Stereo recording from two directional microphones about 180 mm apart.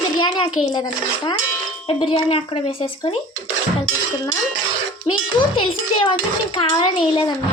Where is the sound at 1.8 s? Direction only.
30° left (ahead or behind).